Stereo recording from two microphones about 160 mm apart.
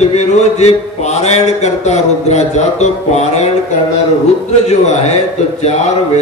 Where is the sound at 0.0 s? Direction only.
45° left (ahead or behind).